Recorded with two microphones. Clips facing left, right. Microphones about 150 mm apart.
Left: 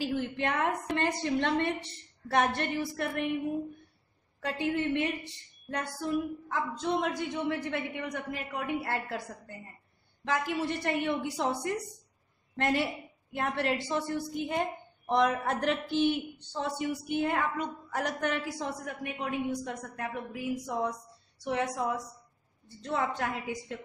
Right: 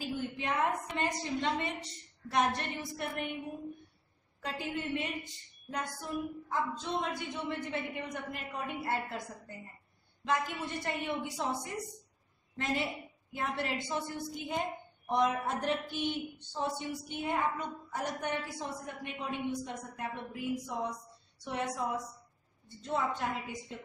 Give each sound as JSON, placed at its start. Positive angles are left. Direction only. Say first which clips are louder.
{"t": 0.0, "sound": "a woman's voice", "louder": "left 5 dB", "side_deg": 80}
{"t": 4.4, "sound": "a woman's voice", "louder": "left 7 dB", "side_deg": 70}
{"t": 10.2, "sound": "a woman's voice", "louder": "left 3 dB", "side_deg": 75}